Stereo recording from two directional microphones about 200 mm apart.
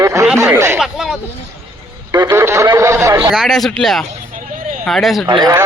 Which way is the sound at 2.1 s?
15° right (ahead or behind).